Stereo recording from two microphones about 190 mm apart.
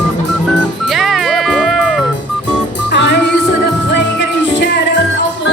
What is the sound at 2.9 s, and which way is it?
Music, 65° left (ahead or behind).